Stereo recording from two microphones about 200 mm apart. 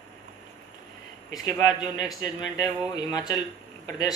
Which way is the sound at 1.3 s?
20° left (ahead or behind).